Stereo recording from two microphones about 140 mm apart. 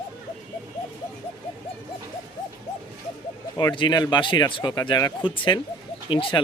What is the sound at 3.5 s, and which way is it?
Speech, 30° left (ahead or behind).